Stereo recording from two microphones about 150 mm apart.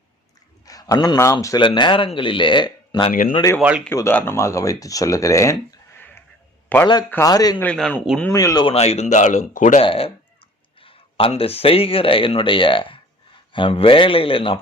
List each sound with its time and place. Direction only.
0.6 s a man's voice: 25° left (ahead or behind)
1.6 s speech: 35° left (ahead or behind)
3.1 s speech: 70° left (ahead or behind)
3.6 s speech: 10° right (ahead or behind)
3.8 s a man's voice: 15° left (ahead or behind)
7.3 s speech: 25° left (ahead or behind)
7.6 s speech: 5° left (ahead or behind)
8.2 s speech: 20° left (ahead or behind)
8.6 s speech: 40° left (ahead or behind); by 9.8 s 60° left (ahead or behind)
9.8 s speech: 35° left (ahead or behind)